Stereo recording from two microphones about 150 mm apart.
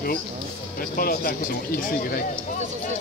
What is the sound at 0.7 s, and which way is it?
Speech, 75° left (ahead or behind).